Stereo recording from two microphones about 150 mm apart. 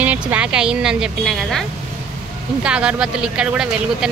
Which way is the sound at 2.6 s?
5° right (ahead or behind).